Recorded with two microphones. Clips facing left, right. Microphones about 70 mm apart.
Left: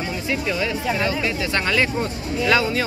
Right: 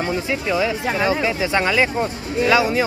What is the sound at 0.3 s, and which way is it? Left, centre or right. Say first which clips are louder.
Speech: right 1 dB; centre.